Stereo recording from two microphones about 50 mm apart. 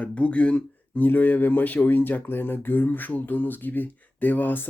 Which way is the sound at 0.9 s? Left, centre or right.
Left.